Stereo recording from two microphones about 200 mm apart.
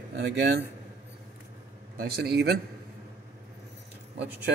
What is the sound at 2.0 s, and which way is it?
Speech, 50° right (ahead or behind).